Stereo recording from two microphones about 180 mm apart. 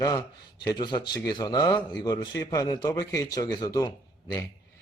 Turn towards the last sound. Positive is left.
turn(degrees=20)  # may be behind; listen again after turning